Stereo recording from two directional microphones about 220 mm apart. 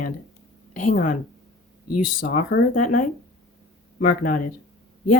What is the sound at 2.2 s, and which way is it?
Speech, 40° left (ahead or behind).